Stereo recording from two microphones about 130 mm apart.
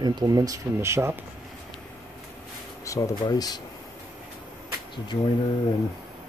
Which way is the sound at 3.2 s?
30° left (ahead or behind).